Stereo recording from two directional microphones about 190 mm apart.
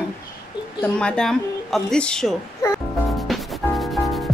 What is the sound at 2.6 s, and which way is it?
Speech, 15° left (ahead or behind).